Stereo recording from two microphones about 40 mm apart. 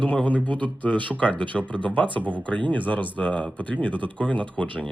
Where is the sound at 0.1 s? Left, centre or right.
Left.